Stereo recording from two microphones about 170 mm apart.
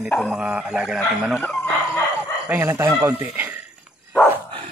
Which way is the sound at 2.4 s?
15° right (ahead or behind).